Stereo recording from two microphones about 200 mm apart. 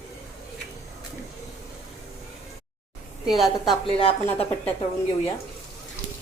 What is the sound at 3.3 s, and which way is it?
Speech, centre (ahead or behind).